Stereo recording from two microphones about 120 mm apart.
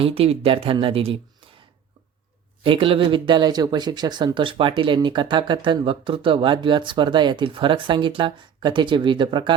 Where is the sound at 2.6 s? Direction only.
45° right (ahead or behind).